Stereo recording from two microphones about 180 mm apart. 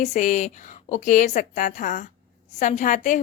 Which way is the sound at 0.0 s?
40° left (ahead or behind).